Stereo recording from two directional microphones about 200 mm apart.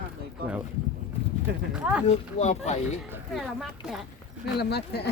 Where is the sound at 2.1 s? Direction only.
35° left (ahead or behind).